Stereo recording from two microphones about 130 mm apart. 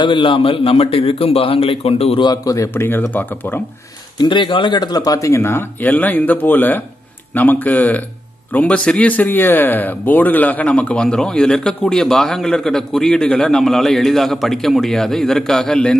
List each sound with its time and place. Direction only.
0.0 s a man's voice: 40° left (ahead or behind)
2.2 s speech: 25° left (ahead or behind)
4.2 s a man's voice: 40° left (ahead or behind); by 16.0 s 5° left (ahead or behind)